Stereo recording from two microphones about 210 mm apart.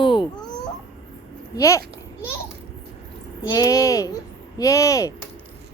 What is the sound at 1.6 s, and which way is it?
Speech, 15° left (ahead or behind).